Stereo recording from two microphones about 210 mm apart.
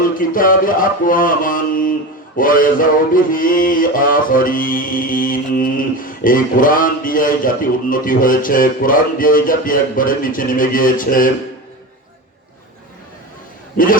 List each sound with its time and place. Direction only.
0.2 s mantra: 40° left (ahead or behind)
13.7 s mantra: 40° left (ahead or behind)